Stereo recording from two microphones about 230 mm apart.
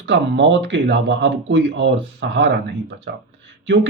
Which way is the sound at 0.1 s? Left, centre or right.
Right.